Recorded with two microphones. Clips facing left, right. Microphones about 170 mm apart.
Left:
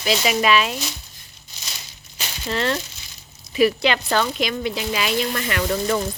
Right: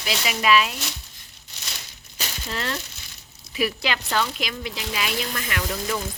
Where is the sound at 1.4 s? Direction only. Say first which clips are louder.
Even; 65° right (ahead or behind).